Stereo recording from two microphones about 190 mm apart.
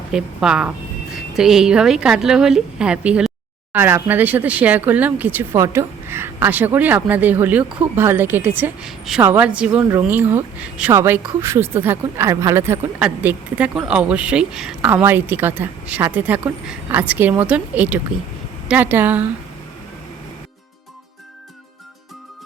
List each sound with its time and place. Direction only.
0.1 s a woman's voice: 5° right (ahead or behind)